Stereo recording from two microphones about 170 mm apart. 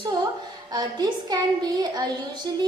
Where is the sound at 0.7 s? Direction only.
25° right (ahead or behind).